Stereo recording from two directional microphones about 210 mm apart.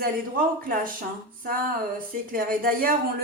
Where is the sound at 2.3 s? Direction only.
45° right (ahead or behind).